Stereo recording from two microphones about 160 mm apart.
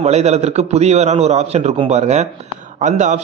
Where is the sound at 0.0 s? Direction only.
45° right (ahead or behind).